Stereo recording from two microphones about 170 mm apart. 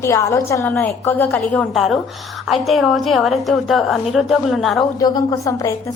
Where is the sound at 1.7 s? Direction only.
Centre (ahead or behind).